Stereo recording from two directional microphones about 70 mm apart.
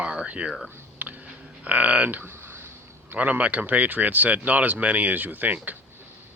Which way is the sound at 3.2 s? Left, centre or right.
Centre.